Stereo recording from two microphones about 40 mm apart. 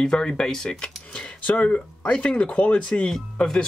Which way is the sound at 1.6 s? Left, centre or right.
Left.